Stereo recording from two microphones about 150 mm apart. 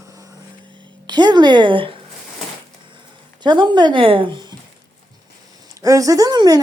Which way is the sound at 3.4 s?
30° right (ahead or behind).